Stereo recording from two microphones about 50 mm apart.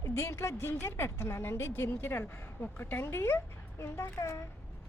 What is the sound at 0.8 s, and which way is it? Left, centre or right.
Speech, left.